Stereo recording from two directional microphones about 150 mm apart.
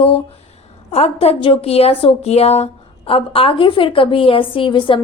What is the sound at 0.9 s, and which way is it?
A woman's voice, 40° left (ahead or behind).